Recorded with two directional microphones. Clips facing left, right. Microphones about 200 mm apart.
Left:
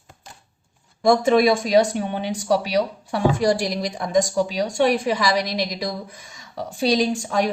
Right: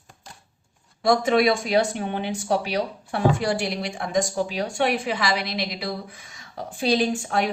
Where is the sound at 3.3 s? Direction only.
40° left (ahead or behind).